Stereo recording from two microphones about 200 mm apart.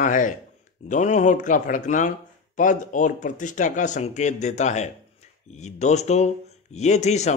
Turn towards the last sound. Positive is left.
turn(degrees=35)  # may be behind; listen again after turning